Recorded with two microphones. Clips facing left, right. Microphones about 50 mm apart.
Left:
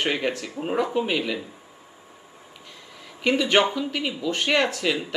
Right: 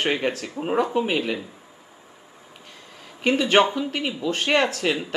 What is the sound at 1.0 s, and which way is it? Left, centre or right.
Speech, right.